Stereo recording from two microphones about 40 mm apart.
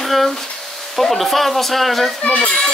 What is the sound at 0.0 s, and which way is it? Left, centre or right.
Speech, centre.